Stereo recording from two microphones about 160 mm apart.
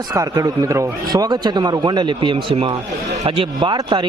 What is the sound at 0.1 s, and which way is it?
A man's voice, 20° right (ahead or behind).